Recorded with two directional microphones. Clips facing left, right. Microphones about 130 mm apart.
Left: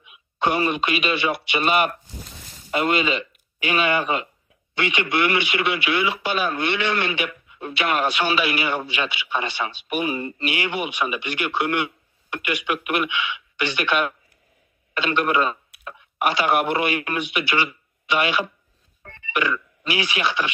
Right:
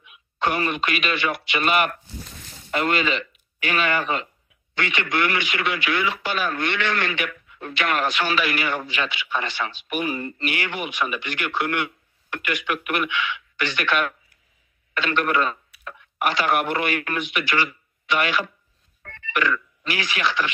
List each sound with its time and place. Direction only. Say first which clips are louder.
0.0 s a man's voice: left 2 dB; 20° left (ahead or behind)
2.7 s speech: left 1 dB; 15° left (ahead or behind)